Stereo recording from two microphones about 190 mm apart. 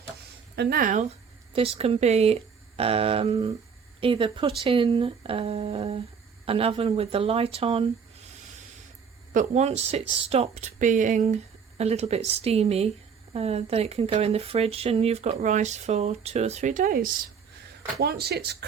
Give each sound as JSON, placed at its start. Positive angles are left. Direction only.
{"t": 0.5, "sound": "speech", "side_deg": -55}
{"t": 1.5, "sound": "speech", "side_deg": -30}
{"t": 9.3, "sound": "speech", "side_deg": -40}